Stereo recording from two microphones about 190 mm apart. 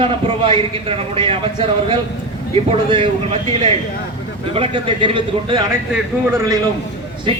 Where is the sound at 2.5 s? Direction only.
30° right (ahead or behind).